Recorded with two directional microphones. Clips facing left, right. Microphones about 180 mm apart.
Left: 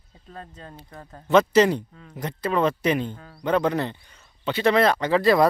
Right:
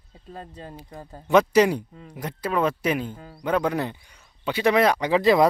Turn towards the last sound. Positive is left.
turn(degrees=-15)  # may be behind; listen again after turning